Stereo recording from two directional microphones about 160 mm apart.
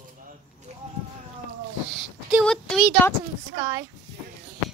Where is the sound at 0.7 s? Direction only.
45° right (ahead or behind).